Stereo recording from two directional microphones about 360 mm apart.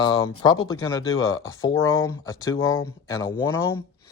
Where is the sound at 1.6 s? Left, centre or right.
Centre.